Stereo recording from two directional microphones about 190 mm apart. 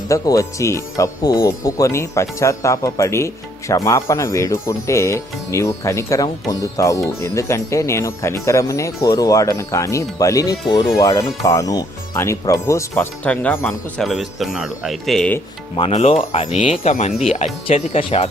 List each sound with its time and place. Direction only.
0.1 s speech: 15° left (ahead or behind)
15.8 s speech: 35° left (ahead or behind)